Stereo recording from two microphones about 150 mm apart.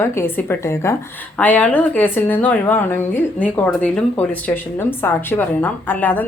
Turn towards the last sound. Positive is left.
turn(degrees=10)  # may be behind; listen again after turning